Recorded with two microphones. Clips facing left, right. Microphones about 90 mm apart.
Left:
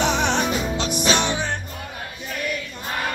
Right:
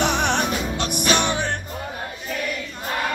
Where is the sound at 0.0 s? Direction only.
60° right (ahead or behind).